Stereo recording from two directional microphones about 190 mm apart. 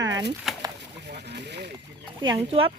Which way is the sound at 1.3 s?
60° right (ahead or behind).